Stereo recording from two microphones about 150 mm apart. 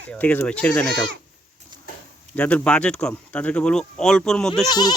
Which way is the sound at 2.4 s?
10° left (ahead or behind).